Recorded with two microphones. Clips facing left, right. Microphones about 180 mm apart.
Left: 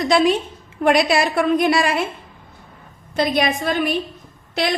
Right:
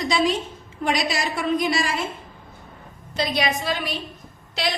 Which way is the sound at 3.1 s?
50° left (ahead or behind).